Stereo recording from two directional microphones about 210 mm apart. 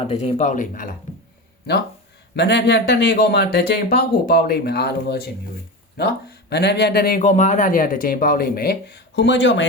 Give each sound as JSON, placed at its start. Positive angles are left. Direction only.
{"t": 0.0, "sound": "speech", "side_deg": 30}
{"t": 2.3, "sound": "speech", "side_deg": 55}